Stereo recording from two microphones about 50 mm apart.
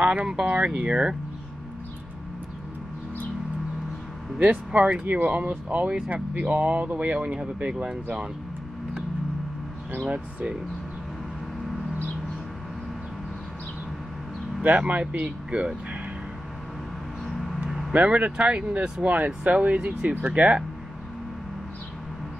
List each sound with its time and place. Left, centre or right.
0.2 s speech: centre
4.4 s speech: right
10.0 s speech: right
14.6 s speech: right
17.3 s a sound: centre
17.6 s vehicle: centre
17.9 s speech: right